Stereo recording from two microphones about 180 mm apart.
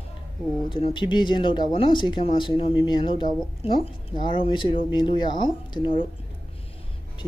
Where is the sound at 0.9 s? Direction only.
25° left (ahead or behind).